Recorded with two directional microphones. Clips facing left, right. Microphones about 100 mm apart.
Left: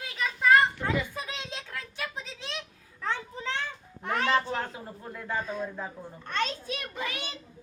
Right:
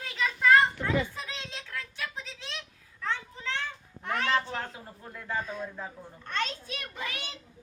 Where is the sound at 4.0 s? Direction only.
35° left (ahead or behind).